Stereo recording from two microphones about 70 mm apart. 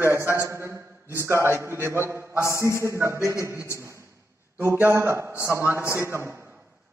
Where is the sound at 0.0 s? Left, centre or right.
Right.